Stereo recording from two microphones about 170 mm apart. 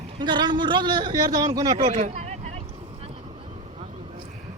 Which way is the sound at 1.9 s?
45° right (ahead or behind).